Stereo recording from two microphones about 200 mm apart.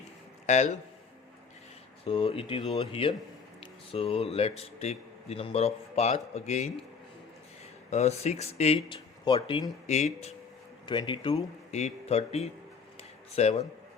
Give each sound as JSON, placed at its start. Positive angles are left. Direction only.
{"t": 0.4, "sound": "speech", "side_deg": 35}
{"t": 2.0, "sound": "speech", "side_deg": 25}
{"t": 7.9, "sound": "speech", "side_deg": 35}
{"t": 10.8, "sound": "speech", "side_deg": 25}
{"t": 13.0, "sound": "a sound", "side_deg": 30}